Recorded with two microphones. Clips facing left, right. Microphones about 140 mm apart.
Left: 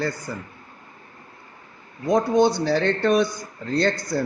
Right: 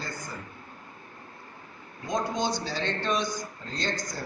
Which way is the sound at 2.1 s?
65° left (ahead or behind).